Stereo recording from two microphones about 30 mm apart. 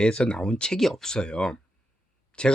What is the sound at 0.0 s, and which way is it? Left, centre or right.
Speech, left.